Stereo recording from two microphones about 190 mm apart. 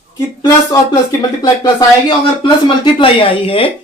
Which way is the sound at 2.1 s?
25° left (ahead or behind).